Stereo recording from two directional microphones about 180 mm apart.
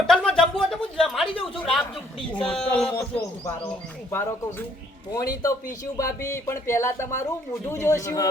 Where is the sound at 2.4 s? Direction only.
5° left (ahead or behind).